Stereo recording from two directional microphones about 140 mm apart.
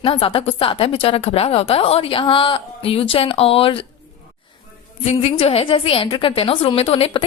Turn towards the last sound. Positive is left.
turn(degrees=40)  # may be behind; listen again after turning